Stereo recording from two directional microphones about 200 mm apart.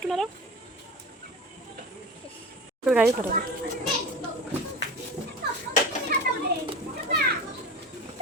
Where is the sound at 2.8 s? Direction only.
5° right (ahead or behind).